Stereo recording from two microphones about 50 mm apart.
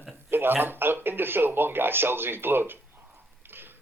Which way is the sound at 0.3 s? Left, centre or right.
Right.